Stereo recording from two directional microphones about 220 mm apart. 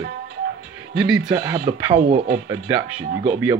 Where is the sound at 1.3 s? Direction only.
15° right (ahead or behind).